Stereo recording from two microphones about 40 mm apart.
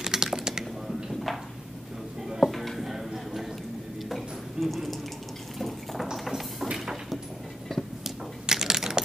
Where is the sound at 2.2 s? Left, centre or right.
Centre.